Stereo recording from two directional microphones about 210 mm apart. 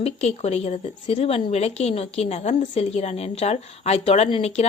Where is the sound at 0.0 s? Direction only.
30° left (ahead or behind).